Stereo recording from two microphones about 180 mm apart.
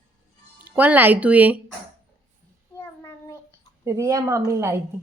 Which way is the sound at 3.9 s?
15° right (ahead or behind).